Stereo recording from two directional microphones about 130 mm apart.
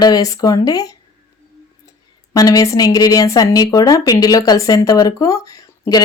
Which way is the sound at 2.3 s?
25° left (ahead or behind).